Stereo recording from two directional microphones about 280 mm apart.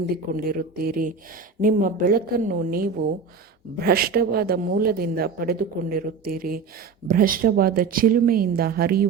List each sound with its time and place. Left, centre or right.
0.3 s speech: right